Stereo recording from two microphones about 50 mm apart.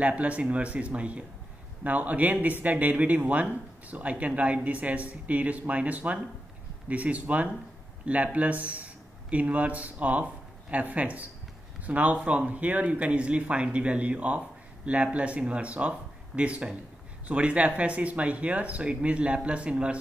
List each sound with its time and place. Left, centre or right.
0.0 s a man's voice: right